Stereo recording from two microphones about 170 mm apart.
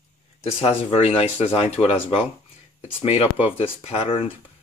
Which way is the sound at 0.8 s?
35° left (ahead or behind).